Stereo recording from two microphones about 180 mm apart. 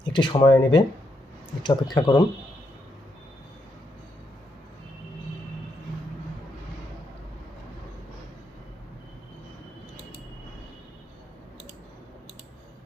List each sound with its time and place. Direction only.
0.0 s speech: 25° left (ahead or behind)